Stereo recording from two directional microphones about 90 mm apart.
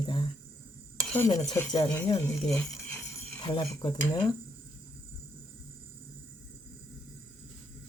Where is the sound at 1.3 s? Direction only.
40° left (ahead or behind).